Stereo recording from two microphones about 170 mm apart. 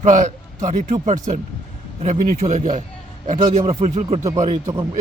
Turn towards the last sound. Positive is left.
turn(degrees=-20)  # may be behind; listen again after turning